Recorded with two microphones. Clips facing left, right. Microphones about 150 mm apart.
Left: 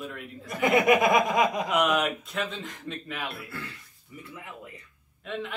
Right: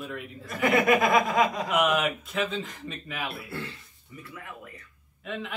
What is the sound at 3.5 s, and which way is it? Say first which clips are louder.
Speech: right 3 dB; 30° right (ahead or behind).